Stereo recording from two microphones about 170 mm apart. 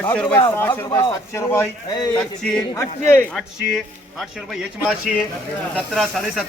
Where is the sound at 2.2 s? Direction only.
5° left (ahead or behind).